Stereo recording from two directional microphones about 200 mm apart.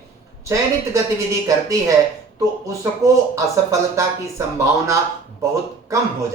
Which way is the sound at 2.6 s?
15° right (ahead or behind).